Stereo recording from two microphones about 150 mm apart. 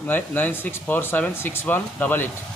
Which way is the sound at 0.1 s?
15° left (ahead or behind).